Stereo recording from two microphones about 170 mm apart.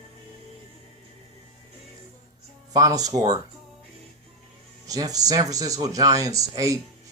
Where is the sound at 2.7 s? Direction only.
20° right (ahead or behind).